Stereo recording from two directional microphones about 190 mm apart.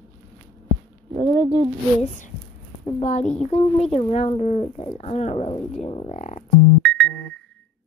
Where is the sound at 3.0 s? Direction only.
35° left (ahead or behind).